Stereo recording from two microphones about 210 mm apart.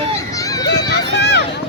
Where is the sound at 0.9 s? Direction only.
50° left (ahead or behind).